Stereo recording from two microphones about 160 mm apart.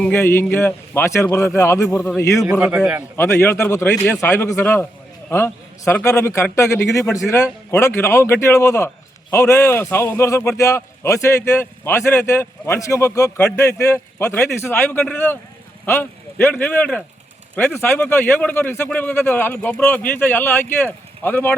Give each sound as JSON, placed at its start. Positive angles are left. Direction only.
{"t": 0.0, "sound": "a man's voice", "side_deg": 10}
{"t": 2.5, "sound": "a man's voice", "side_deg": -15}
{"t": 3.2, "sound": "a man's voice", "side_deg": 15}